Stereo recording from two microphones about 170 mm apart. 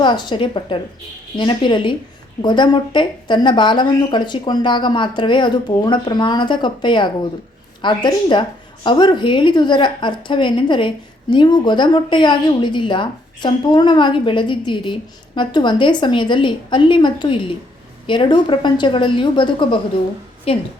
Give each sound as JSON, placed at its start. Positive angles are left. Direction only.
{"t": 0.0, "sound": "a woman's voice", "side_deg": 25}